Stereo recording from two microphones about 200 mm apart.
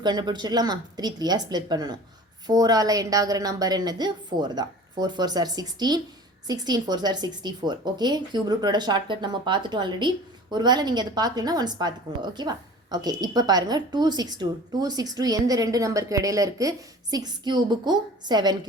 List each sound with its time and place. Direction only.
0.0 s speech: 20° right (ahead or behind)